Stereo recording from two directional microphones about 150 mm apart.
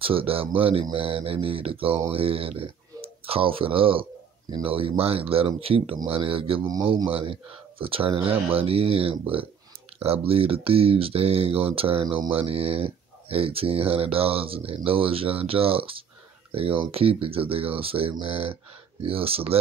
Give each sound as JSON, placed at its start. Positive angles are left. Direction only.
{"t": 0.0, "sound": "speech", "side_deg": -35}